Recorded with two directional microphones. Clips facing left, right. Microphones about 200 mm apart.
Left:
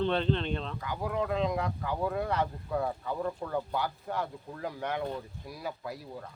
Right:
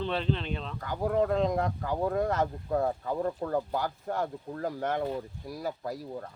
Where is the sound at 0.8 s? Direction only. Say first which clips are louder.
Right 9 dB; 45° right (ahead or behind).